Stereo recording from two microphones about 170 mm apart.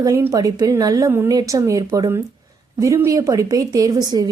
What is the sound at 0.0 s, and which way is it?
A woman's voice, 15° right (ahead or behind).